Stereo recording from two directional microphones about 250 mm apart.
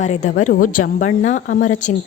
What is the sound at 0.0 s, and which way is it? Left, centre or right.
Speech, left.